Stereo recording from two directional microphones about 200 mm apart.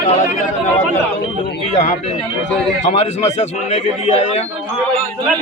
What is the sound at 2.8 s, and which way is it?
Speech, 35° left (ahead or behind).